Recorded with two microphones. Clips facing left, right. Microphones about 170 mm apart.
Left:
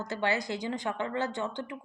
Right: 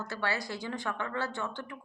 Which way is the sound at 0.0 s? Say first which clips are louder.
Left 4 dB; 20° left (ahead or behind).